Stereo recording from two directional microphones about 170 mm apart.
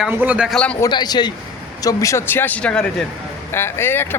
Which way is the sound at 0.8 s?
25° left (ahead or behind).